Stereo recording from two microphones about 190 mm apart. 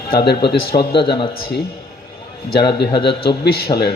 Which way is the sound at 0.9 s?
25° left (ahead or behind).